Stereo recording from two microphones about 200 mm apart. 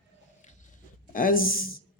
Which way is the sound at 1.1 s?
45° left (ahead or behind).